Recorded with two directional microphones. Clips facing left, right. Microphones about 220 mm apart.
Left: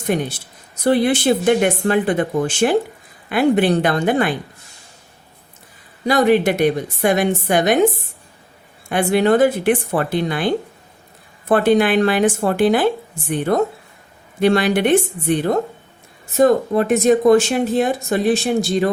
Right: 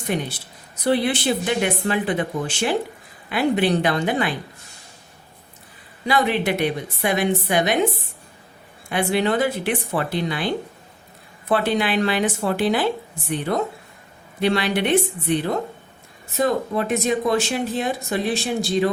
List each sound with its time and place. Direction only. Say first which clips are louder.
0.1 s speech: left 4 dB; 50° left (ahead or behind)
6.1 s speech: left 6 dB; 45° left (ahead or behind)
8.9 s speech: left 6 dB; 50° left (ahead or behind)